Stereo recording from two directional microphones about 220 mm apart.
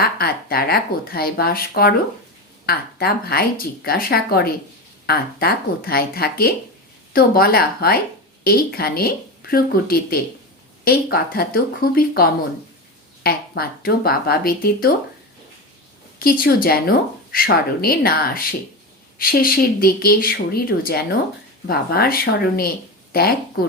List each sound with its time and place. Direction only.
0.0 s speech: 45° left (ahead or behind)
16.1 s speech: 40° left (ahead or behind)